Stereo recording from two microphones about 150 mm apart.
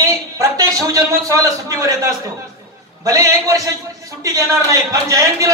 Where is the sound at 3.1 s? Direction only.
25° right (ahead or behind).